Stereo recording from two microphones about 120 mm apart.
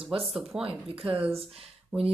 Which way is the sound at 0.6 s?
50° right (ahead or behind).